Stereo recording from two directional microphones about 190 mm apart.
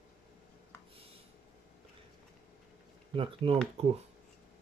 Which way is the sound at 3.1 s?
30° right (ahead or behind).